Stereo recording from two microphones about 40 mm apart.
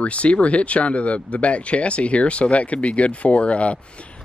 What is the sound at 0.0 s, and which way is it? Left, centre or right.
Speech, left.